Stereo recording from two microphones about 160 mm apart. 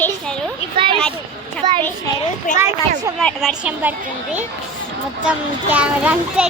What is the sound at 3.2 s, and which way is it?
Speech, centre (ahead or behind).